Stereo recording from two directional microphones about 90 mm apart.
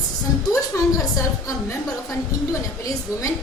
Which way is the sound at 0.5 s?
40° left (ahead or behind).